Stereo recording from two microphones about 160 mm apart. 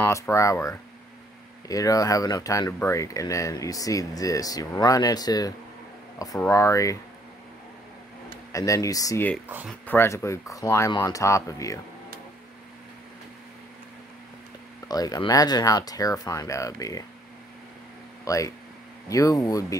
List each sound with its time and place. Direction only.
0.0 s speech: 20° left (ahead or behind)
8.5 s speech: 20° left (ahead or behind)
14.9 s speech: 25° left (ahead or behind)
18.2 s speech: 20° left (ahead or behind)